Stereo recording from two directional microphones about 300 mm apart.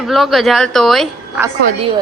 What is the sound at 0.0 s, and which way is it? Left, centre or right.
A woman's voice, centre.